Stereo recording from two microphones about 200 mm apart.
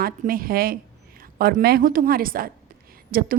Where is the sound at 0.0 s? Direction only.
45° right (ahead or behind).